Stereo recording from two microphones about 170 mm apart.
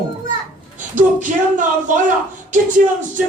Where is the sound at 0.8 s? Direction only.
50° right (ahead or behind).